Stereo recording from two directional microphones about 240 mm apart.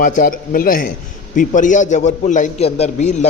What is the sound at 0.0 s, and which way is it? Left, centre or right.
A man's voice, left.